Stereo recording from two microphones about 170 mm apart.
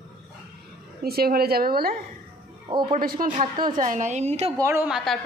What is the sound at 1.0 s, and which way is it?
Speech, 65° right (ahead or behind).